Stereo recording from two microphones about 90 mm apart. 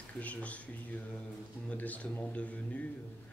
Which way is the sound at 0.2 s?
15° left (ahead or behind).